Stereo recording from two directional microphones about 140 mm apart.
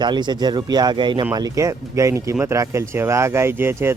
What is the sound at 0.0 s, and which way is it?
Speech, 30° right (ahead or behind).